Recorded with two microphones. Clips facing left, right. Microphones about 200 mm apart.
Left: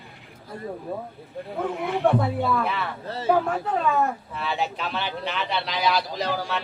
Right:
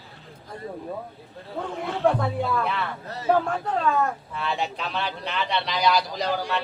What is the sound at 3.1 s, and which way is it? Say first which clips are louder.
Speech: left 1 dB; 30° left (ahead or behind).